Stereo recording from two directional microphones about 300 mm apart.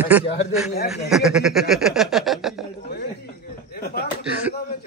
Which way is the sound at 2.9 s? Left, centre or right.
Left.